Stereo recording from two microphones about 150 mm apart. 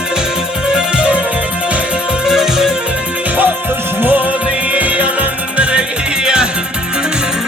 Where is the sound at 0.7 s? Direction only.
5° right (ahead or behind).